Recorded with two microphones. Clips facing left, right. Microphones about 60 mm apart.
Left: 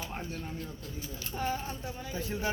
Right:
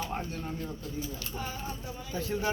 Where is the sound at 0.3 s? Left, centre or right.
Centre.